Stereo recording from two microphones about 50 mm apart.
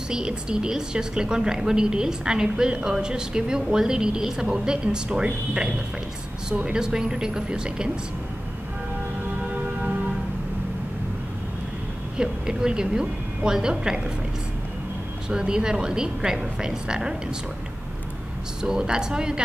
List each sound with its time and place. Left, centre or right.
0.1 s a woman's voice: centre
12.2 s a woman's voice: centre
15.2 s a woman's voice: centre
18.6 s a woman's voice: centre